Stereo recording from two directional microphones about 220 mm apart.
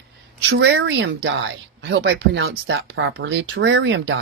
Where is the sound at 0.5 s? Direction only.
55° right (ahead or behind).